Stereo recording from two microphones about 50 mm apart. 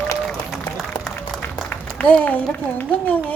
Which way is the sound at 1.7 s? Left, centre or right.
Left.